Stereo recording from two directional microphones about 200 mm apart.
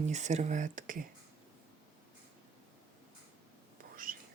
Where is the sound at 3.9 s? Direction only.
45° right (ahead or behind).